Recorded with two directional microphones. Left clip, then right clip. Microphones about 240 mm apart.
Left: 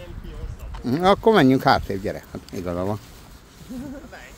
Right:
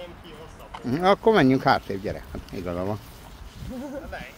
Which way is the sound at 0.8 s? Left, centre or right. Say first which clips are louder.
Left 2 dB; left.